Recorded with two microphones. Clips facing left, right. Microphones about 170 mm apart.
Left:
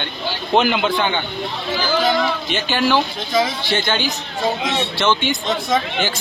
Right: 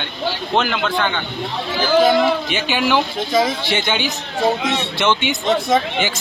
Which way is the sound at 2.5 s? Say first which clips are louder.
Even; 10° right (ahead or behind).